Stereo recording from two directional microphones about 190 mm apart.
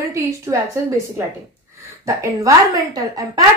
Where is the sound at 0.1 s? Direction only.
15° right (ahead or behind).